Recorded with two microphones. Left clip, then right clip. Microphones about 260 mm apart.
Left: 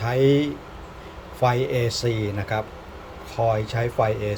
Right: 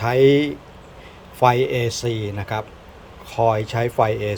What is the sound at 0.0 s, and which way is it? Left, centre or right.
Speech, centre.